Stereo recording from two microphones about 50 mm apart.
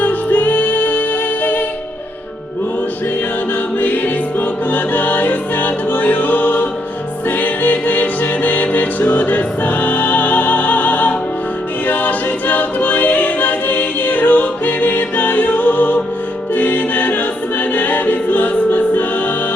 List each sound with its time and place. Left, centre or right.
0.0 s music: left
3.8 s music: left
11.9 s a capella: left
16.6 s choir: left